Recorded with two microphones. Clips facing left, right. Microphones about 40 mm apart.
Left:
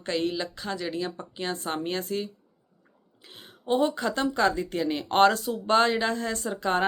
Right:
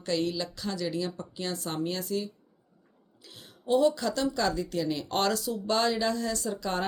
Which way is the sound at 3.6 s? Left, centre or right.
Left.